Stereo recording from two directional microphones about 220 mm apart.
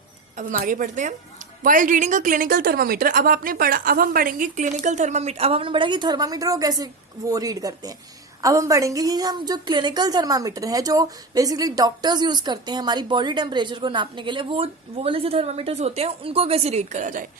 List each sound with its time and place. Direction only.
0.3 s a woman's voice: 35° right (ahead or behind)